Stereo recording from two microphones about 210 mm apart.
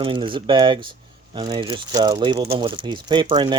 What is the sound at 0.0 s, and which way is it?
Speech, 25° right (ahead or behind).